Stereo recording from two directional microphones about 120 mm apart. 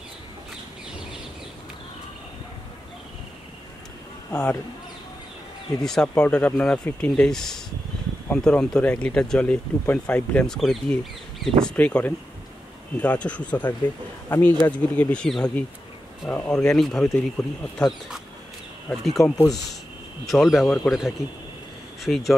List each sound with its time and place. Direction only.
4.3 s speech: 15° left (ahead or behind)
5.9 s speech: 5° left (ahead or behind); by 14.7 s 20° left (ahead or behind)
14.7 s speech: 10° left (ahead or behind)